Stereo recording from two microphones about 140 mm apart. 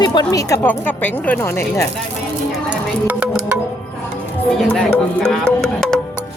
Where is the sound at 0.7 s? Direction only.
10° left (ahead or behind).